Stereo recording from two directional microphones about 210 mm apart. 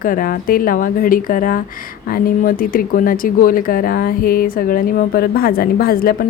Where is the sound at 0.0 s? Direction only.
40° left (ahead or behind).